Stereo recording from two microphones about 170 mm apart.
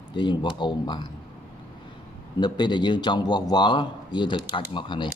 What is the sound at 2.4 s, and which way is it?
Speech, 25° left (ahead or behind).